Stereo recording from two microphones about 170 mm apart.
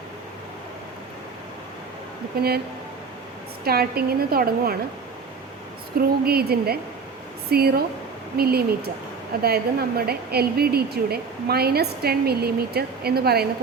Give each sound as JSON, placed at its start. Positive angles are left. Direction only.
{"t": 2.3, "sound": "a woman's voice", "side_deg": -65}
{"t": 3.6, "sound": "a woman's voice", "side_deg": -65}
{"t": 6.2, "sound": "a woman's voice", "side_deg": -65}